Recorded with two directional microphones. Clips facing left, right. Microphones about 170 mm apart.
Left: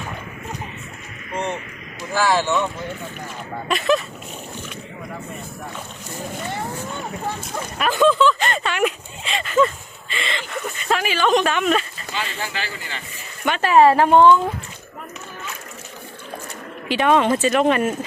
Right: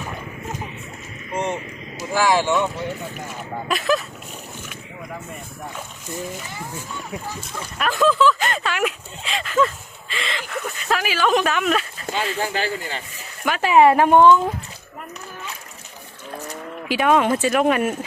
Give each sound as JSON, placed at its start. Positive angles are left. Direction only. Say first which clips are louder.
{"t": 1.3, "sound": "speech", "louder": "right 1 dB", "side_deg": -20}
{"t": 3.7, "sound": "speech", "louder": "left 2 dB", "side_deg": 0}
{"t": 6.5, "sound": "speech", "louder": "left 5 dB", "side_deg": 60}
{"t": 7.8, "sound": "speech", "louder": "left 2 dB", "side_deg": 0}
{"t": 12.0, "sound": "speech", "louder": "right 4 dB", "side_deg": -45}
{"t": 13.6, "sound": "speech", "louder": "even", "side_deg": -15}
{"t": 16.9, "sound": "speech", "louder": "left 1 dB", "side_deg": -5}